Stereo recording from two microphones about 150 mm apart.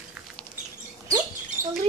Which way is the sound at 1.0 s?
25° right (ahead or behind).